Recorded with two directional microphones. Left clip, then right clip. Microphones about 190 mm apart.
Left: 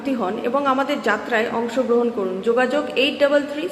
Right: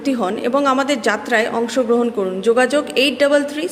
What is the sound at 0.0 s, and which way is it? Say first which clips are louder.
A woman's voice: right 3 dB; 50° right (ahead or behind).